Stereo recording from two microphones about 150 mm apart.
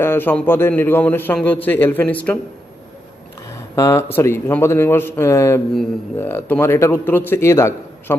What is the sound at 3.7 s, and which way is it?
A man's voice, 20° left (ahead or behind).